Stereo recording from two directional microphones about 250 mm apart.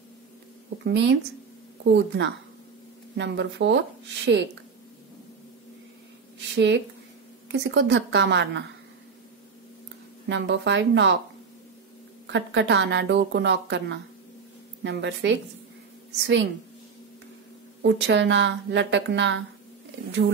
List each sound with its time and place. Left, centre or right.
0.8 s speech: right
6.5 s speech: right
10.2 s speech: right
12.3 s speech: right
17.8 s speech: right